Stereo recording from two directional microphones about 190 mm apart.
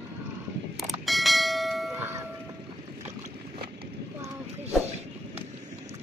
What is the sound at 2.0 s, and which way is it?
Train, 15° right (ahead or behind).